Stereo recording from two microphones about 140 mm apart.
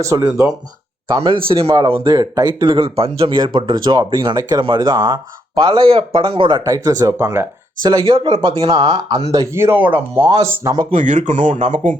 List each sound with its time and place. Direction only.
0.0 s speech: 20° right (ahead or behind)
1.2 s speech: 40° right (ahead or behind); by 7.4 s 20° right (ahead or behind)
7.8 s speech: 30° right (ahead or behind)
9.3 s speech: 20° right (ahead or behind)
10.9 s speech: 60° right (ahead or behind)